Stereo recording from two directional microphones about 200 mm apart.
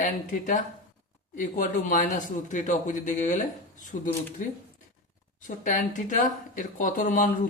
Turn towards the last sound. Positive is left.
turn(degrees=40)  # may be behind; listen again after turning